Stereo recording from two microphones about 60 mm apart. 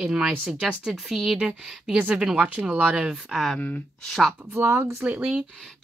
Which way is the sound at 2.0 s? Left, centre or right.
Centre.